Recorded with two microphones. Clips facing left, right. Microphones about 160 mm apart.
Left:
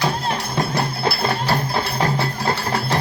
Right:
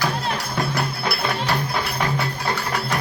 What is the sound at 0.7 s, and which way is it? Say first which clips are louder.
Music: left 3 dB; 30° left (ahead or behind).